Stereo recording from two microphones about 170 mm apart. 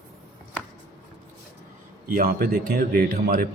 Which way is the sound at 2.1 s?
60° right (ahead or behind).